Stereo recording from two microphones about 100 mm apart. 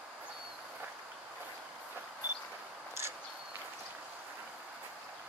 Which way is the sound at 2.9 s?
25° right (ahead or behind).